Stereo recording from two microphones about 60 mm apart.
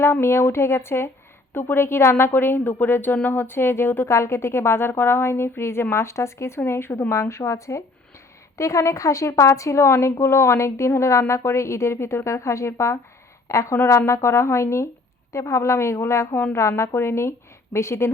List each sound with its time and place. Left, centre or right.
0.0 s a woman's voice: left
7.1 s a woman's voice: left